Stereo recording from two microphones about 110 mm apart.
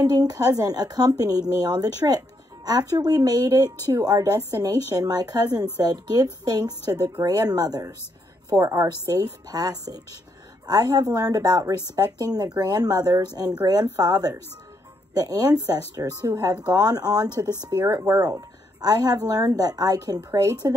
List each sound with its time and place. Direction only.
0.0 s a woman's voice: 35° right (ahead or behind)